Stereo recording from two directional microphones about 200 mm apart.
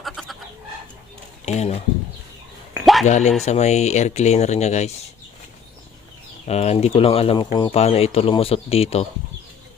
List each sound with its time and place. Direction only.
0.0 s chicken: centre (ahead or behind)
1.5 s speech: 30° left (ahead or behind)
2.8 s a sound: centre (ahead or behind)
3.1 s speech: 35° left (ahead or behind)
6.4 s speech: 30° left (ahead or behind)